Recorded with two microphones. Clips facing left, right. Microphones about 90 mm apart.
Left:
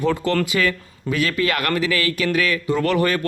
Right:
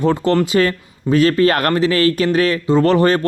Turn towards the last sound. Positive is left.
turn(degrees=-30)  # may be behind; listen again after turning